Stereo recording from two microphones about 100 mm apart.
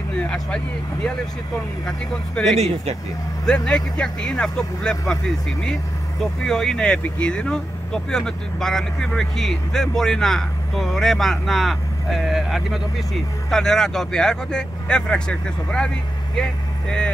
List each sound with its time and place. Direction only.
0.2 s speech: 10° left (ahead or behind)
1.9 s speech: 5° left (ahead or behind)
2.6 s speech: 90° right
3.4 s speech: 5° left (ahead or behind)